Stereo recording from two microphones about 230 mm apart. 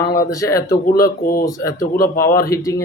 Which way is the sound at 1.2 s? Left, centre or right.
Left.